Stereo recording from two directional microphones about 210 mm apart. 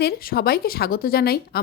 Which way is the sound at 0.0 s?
45° left (ahead or behind).